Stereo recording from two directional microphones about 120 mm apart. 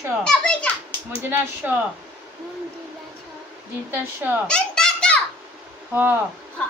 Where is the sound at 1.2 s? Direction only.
15° right (ahead or behind).